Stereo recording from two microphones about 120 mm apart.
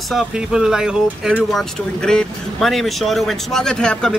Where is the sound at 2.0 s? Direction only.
5° left (ahead or behind).